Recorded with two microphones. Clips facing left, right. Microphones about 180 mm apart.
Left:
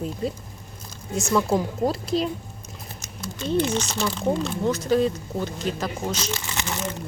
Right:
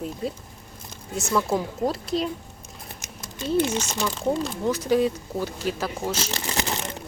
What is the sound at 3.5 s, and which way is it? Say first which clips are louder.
Speech: even; 5° right (ahead or behind).